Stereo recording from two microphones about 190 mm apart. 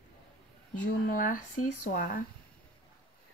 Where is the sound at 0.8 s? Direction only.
45° left (ahead or behind).